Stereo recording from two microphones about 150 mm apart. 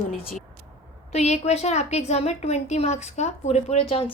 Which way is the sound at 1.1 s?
45° left (ahead or behind).